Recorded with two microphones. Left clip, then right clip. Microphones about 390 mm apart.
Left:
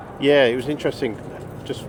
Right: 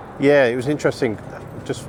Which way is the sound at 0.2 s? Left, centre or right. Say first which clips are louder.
Right 1 dB; centre.